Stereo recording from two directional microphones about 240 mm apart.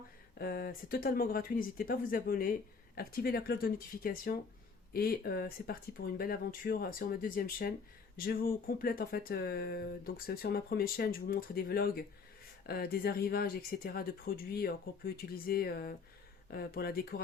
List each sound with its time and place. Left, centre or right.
0.3 s speech: left